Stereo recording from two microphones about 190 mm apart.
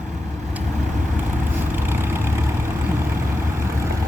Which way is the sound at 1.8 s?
10° right (ahead or behind).